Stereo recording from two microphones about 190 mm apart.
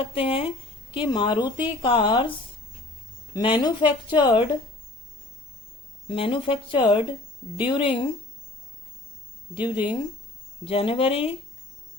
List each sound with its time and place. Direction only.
0.0 s a woman's voice: 30° left (ahead or behind)
3.3 s a woman's voice: 25° left (ahead or behind)
6.1 s a woman's voice: 30° left (ahead or behind)
9.6 s a woman's voice: 25° left (ahead or behind)